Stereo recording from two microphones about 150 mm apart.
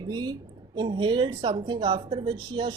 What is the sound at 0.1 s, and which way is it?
A woman's voice, 30° right (ahead or behind).